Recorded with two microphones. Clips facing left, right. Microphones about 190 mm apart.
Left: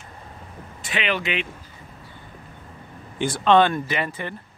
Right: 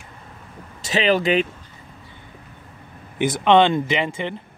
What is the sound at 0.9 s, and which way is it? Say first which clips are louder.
Speech: right 8 dB; 35° right (ahead or behind).